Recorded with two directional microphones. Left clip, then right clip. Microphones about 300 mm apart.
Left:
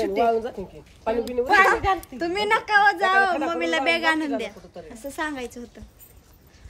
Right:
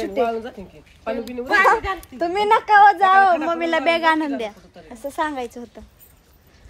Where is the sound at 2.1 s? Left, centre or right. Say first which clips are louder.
Right 5 dB; centre.